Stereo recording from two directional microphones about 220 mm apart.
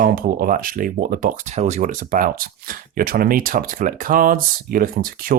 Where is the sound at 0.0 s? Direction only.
40° right (ahead or behind).